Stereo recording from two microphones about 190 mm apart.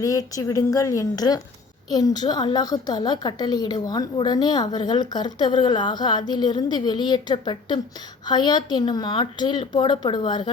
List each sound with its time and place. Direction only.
0.0 s a woman's voice: 20° left (ahead or behind)